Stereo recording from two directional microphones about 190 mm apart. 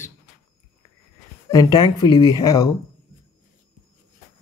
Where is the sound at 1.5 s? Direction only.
20° left (ahead or behind).